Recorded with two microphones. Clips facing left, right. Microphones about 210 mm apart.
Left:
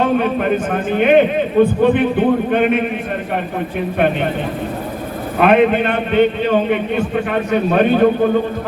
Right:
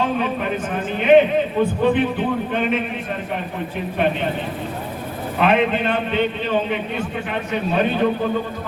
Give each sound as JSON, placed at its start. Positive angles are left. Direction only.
{"t": 0.0, "sound": "a man's voice", "side_deg": 60}
{"t": 3.9, "sound": "a man's voice", "side_deg": 60}
{"t": 5.4, "sound": "a man's voice", "side_deg": 55}